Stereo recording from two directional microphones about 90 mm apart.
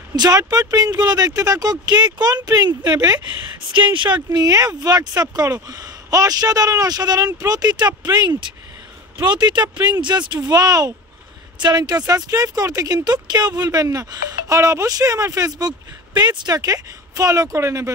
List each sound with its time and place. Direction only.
0.1 s speech: 45° right (ahead or behind)
16.2 s speech: 50° right (ahead or behind); by 17.9 s 35° right (ahead or behind)